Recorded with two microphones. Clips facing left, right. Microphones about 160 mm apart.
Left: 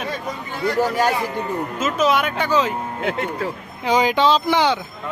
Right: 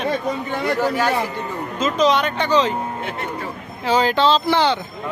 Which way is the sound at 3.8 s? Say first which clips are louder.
Even; 15° left (ahead or behind).